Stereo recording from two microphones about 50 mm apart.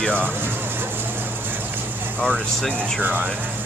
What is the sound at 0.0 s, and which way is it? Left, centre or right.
Speech, left.